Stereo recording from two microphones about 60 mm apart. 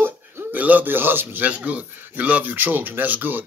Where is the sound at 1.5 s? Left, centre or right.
Right.